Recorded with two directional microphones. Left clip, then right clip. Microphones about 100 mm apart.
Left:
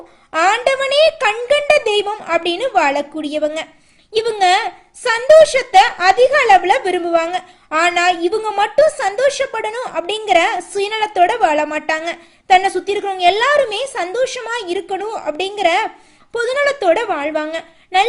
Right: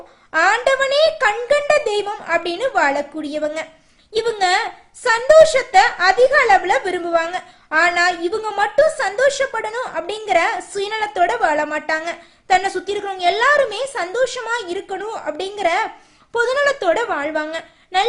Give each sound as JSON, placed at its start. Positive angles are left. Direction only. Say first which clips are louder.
{"t": 0.3, "sound": "speech", "louder": "left 1 dB", "side_deg": 30}
{"t": 16.3, "sound": "a woman's voice", "louder": "even", "side_deg": 20}